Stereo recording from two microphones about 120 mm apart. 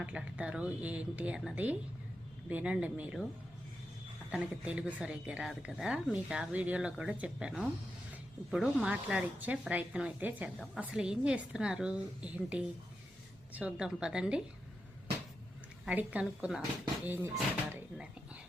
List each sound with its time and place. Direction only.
0.0 s speech: 10° right (ahead or behind)
4.3 s speech: 10° right (ahead or behind)
15.9 s speech: 10° right (ahead or behind)